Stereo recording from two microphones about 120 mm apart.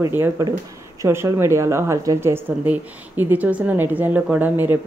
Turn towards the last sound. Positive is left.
turn(degrees=-15)  # may be behind; listen again after turning